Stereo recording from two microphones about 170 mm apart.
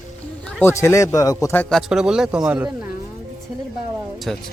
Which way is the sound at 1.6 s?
Centre (ahead or behind).